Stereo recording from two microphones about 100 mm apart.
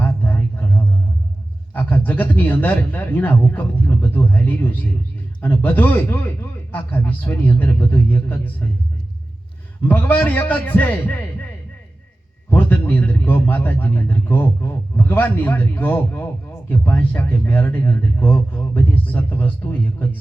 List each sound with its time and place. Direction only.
0.0 s a sound: 20° left (ahead or behind)
1.7 s a man's voice: 15° left (ahead or behind)
9.9 s speech: 20° left (ahead or behind)
12.5 s a man's voice: 20° left (ahead or behind)